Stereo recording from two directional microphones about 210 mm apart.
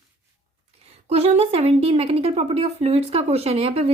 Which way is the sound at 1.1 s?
30° right (ahead or behind).